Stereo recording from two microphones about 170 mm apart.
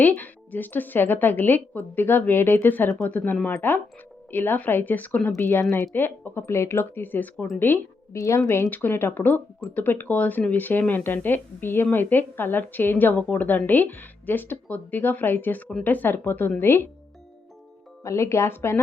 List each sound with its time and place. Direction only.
0.0 s a woman's voice: 10° left (ahead or behind)
18.0 s speech: 15° left (ahead or behind)